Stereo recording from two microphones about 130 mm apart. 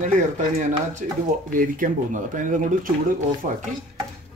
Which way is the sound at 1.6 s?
85° right.